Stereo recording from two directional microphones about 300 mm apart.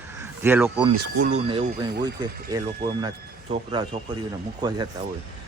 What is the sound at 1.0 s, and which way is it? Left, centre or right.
Speech, right.